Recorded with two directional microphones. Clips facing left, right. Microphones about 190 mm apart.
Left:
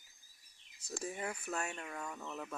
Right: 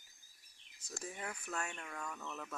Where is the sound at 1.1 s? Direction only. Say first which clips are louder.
Left 3 dB; 10° left (ahead or behind).